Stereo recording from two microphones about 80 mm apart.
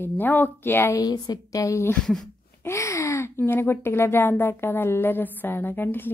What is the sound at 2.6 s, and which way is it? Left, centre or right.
Speech, left.